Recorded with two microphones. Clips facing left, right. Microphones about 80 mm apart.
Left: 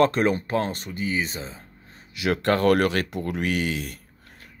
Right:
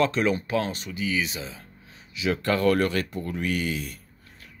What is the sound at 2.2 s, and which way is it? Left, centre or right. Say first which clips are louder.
Speech: left 2 dB; left.